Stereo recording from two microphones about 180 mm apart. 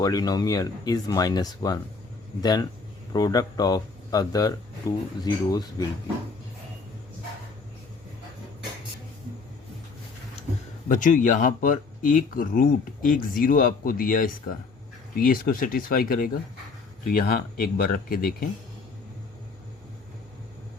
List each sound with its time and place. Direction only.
0.0 s speech: 20° left (ahead or behind)
10.8 s speech: 45° left (ahead or behind)